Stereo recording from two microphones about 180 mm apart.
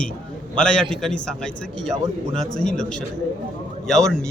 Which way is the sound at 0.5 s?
5° left (ahead or behind).